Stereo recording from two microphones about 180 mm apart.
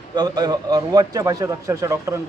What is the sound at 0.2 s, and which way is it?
A man's voice, 20° right (ahead or behind).